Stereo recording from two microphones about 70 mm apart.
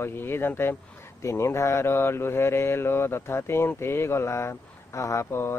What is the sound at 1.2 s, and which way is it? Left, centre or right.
Speech, left.